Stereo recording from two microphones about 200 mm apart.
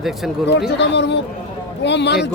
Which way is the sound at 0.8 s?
60° left (ahead or behind).